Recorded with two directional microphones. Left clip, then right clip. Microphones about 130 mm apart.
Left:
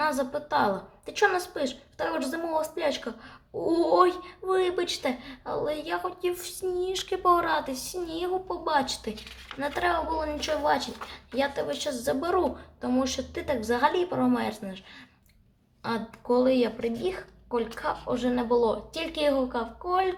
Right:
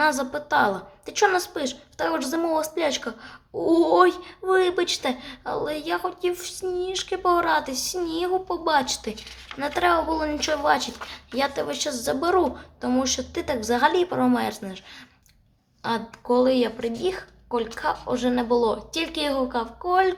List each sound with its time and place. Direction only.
0.0 s a woman's voice: 25° right (ahead or behind)
6.3 s a woman's voice: 10° right (ahead or behind); by 11.9 s 35° right (ahead or behind)
12.0 s a woman's voice: 25° right (ahead or behind)
15.8 s a woman's voice: 20° right (ahead or behind)